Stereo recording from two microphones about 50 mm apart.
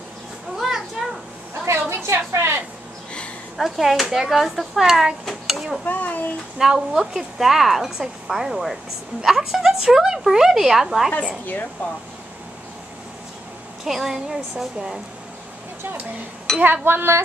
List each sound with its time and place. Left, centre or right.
0.6 s children playing: centre
1.7 s a sound: right
3.5 s a woman's voice: centre
5.9 s speech: left
6.6 s a woman's voice: centre
13.8 s a woman's voice: centre
16.5 s chink: centre
16.8 s speech: right